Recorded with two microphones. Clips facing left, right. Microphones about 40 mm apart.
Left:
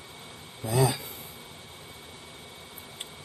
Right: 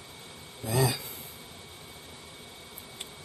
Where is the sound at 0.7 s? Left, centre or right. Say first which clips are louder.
Left 2 dB; left.